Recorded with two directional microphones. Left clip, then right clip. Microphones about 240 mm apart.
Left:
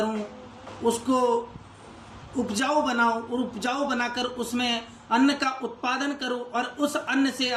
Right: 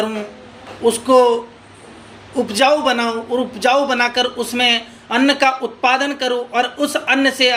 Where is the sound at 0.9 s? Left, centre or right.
Centre.